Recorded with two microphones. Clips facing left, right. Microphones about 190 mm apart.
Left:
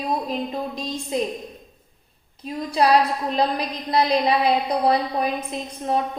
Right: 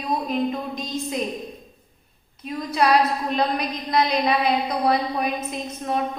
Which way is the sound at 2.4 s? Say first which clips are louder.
Left 1 dB; 30° left (ahead or behind).